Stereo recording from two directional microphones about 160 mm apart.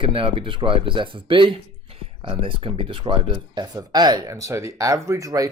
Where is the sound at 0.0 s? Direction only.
35° right (ahead or behind).